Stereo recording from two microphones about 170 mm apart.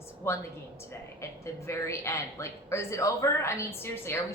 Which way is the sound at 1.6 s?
15° left (ahead or behind).